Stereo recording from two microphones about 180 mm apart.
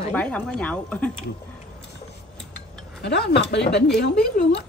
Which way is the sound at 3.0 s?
65° left (ahead or behind).